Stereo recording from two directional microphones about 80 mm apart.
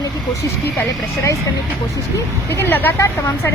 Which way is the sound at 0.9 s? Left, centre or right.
Left.